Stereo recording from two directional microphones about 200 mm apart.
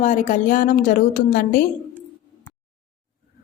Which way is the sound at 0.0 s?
40° left (ahead or behind).